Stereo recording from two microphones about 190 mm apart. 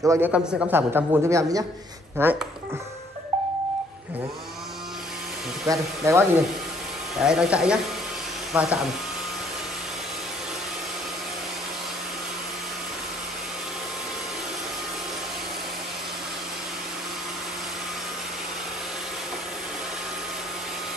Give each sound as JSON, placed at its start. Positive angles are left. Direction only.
{"t": 0.0, "sound": "a man's voice", "side_deg": -15}
{"t": 5.7, "sound": "a man's voice", "side_deg": -15}
{"t": 7.2, "sound": "speech", "side_deg": -5}